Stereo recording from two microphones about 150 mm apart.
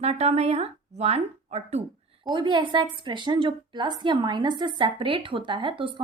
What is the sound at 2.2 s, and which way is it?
A woman's voice, 30° right (ahead or behind).